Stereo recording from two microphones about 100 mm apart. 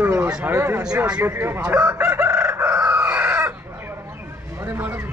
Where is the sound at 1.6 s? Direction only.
15° right (ahead or behind).